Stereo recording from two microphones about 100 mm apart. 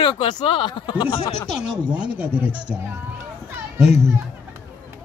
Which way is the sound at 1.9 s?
15° right (ahead or behind).